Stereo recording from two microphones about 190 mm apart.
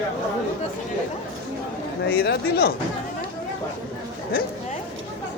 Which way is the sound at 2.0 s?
60° left (ahead or behind).